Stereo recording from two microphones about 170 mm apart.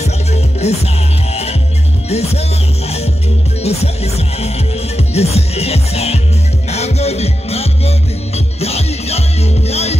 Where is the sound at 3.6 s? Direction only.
40° left (ahead or behind).